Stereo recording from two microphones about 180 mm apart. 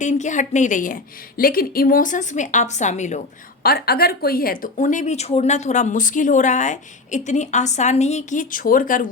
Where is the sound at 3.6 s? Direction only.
60° left (ahead or behind).